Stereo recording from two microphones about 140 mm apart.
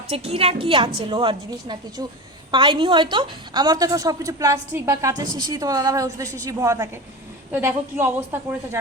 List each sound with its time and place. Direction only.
0.1 s a woman's voice: 45° right (ahead or behind); by 8.8 s 15° right (ahead or behind)